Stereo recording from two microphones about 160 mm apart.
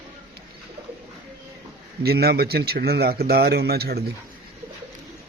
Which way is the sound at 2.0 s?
75° right (ahead or behind).